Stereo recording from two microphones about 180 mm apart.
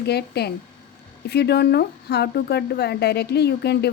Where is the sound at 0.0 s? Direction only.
65° left (ahead or behind).